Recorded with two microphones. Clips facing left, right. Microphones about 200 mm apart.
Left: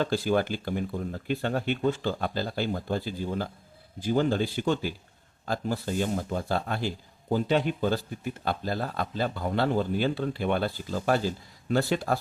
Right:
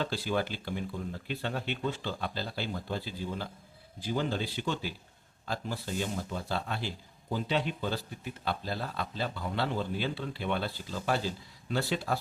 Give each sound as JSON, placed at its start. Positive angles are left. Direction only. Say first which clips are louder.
{"t": 0.0, "sound": "speech", "louder": "left 6 dB", "side_deg": 50}